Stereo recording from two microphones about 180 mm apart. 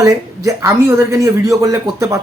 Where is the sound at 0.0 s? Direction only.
15° right (ahead or behind).